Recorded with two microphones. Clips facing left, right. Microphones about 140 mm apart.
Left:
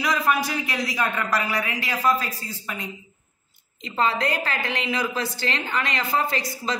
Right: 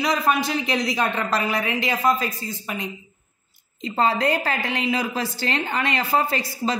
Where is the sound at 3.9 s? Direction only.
35° right (ahead or behind).